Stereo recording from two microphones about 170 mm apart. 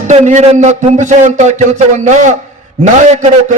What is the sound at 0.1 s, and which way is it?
A man's voice, 45° right (ahead or behind).